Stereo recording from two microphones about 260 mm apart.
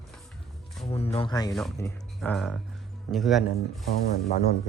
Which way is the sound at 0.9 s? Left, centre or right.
Left.